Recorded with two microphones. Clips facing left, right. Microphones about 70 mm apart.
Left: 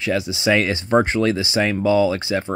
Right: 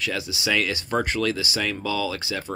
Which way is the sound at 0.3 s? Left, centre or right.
Left.